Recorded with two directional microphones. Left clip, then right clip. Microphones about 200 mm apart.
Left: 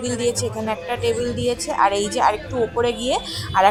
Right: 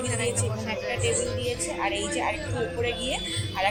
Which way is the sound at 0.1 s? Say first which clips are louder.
Left 6 dB; 30° left (ahead or behind).